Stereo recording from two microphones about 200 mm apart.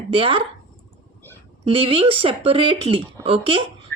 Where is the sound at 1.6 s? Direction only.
25° right (ahead or behind).